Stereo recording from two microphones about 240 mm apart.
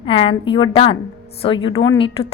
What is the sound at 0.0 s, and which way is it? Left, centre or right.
A woman's voice, left.